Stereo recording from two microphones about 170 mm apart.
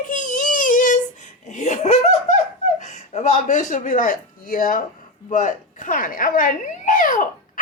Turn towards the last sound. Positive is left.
turn(degrees=50)  # may be behind; listen again after turning